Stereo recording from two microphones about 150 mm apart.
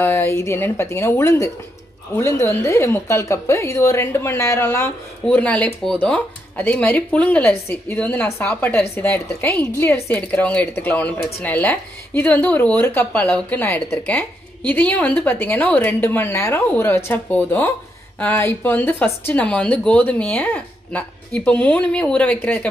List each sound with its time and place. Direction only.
0.0 s a woman's voice: 15° left (ahead or behind)